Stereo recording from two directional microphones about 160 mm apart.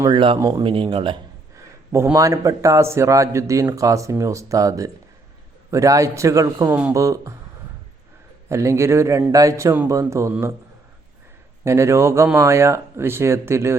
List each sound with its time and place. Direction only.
0.0 s speech: 30° right (ahead or behind)
1.9 s speech: 15° right (ahead or behind)
8.4 s a man's voice: 20° right (ahead or behind)
11.6 s a man's voice: 15° right (ahead or behind)